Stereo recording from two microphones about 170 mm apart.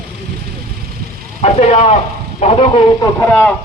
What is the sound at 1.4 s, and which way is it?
Speech, 40° left (ahead or behind).